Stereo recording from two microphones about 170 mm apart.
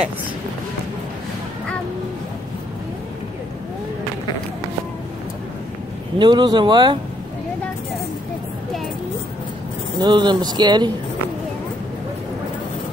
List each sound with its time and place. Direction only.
6.1 s speech: 25° right (ahead or behind)
9.9 s speech: 25° right (ahead or behind)